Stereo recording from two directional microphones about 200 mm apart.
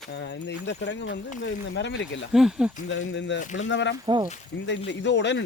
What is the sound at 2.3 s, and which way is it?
Speech, 5° right (ahead or behind).